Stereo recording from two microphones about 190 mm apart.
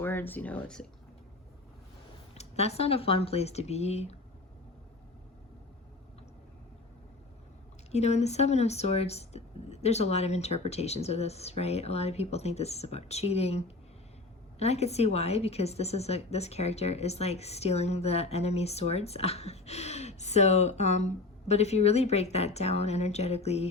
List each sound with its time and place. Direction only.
0.0 s speech: 10° left (ahead or behind)
2.3 s a woman's voice: 35° left (ahead or behind)
7.9 s a woman's voice: 35° left (ahead or behind)